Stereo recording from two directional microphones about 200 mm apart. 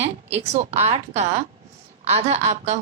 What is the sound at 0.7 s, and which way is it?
A woman's voice, 35° right (ahead or behind).